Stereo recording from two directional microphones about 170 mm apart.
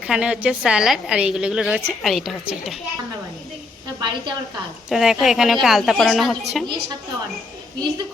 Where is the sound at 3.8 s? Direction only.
25° right (ahead or behind).